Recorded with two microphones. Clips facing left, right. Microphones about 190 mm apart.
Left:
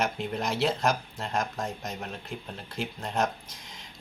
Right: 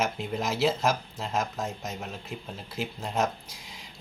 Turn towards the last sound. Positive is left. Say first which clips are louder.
# even
turn(degrees=-5)  # may be behind; listen again after turning